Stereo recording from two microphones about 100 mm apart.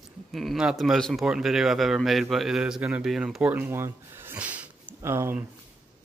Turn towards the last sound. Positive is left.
turn(degrees=-25)  # may be behind; listen again after turning